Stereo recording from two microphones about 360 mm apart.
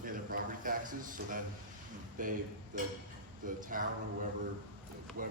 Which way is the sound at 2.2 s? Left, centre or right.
Right.